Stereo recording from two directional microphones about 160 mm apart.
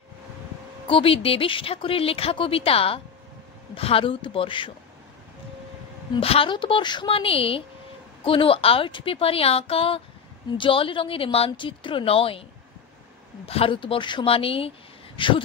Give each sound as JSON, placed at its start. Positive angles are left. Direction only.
{"t": 0.8, "sound": "speech", "side_deg": 35}
{"t": 6.1, "sound": "speech", "side_deg": 35}
{"t": 13.5, "sound": "speech", "side_deg": 35}